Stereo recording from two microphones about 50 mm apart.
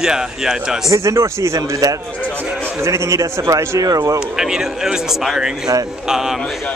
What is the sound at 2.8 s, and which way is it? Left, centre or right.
A man's voice, right.